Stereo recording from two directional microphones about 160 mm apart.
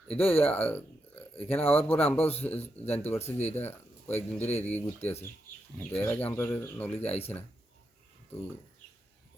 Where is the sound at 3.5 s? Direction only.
15° left (ahead or behind).